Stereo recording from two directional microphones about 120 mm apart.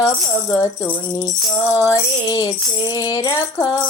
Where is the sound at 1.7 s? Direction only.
25° left (ahead or behind).